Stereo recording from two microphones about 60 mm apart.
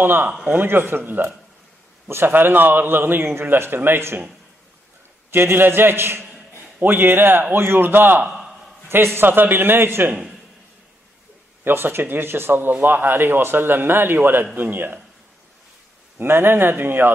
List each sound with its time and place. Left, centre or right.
0.0 s a man's voice: right
5.3 s a man's voice: right
11.6 s a man's voice: right
16.2 s a man's voice: right